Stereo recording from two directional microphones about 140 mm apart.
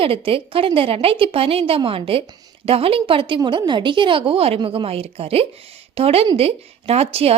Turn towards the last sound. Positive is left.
turn(degrees=-45)  # may be behind; listen again after turning